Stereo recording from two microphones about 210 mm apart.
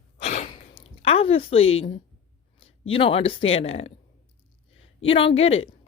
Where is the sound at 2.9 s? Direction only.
25° left (ahead or behind).